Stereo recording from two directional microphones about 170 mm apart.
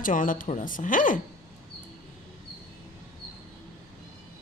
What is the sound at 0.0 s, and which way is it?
Speech, 50° left (ahead or behind).